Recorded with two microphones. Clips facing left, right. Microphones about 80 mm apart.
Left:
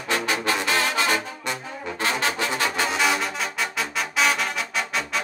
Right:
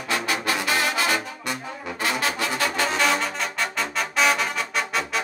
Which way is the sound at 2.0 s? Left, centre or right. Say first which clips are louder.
Left 1 dB; left.